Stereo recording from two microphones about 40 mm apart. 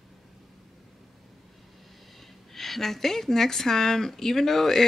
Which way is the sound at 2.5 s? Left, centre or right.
Centre.